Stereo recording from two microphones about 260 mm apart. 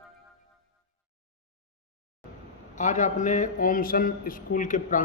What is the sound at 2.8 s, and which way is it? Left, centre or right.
A man's voice, left.